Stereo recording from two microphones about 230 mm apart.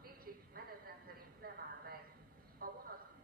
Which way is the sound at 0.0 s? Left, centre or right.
Right.